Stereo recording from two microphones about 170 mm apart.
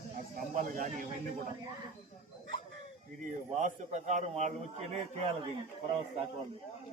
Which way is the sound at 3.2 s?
50° right (ahead or behind).